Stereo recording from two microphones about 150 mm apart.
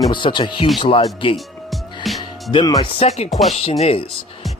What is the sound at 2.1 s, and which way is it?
Music, centre (ahead or behind).